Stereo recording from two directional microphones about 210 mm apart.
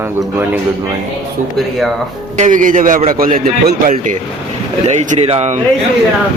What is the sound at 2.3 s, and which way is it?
A man's voice, 35° right (ahead or behind).